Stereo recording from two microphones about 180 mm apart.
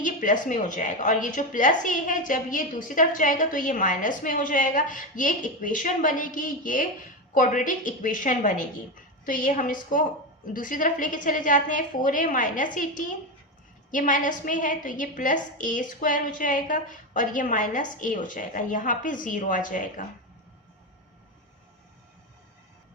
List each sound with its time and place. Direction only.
0.0 s a woman's voice: 45° left (ahead or behind)